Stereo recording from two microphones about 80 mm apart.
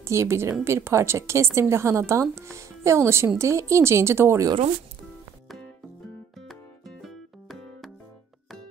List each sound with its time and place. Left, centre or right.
0.0 s a woman's voice: right
7.0 s music: centre